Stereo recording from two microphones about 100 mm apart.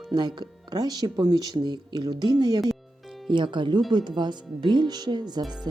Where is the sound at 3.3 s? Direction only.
55° right (ahead or behind).